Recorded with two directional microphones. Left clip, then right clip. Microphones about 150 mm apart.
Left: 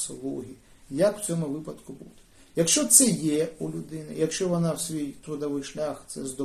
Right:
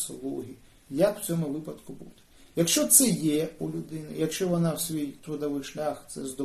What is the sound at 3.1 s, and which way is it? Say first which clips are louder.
A man's voice: left 1 dB; 5° left (ahead or behind).